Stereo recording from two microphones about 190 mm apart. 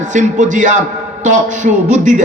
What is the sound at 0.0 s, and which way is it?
A man's voice, 40° right (ahead or behind).